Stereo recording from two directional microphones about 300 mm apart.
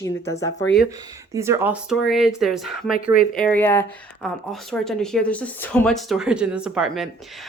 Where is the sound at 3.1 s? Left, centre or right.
Left.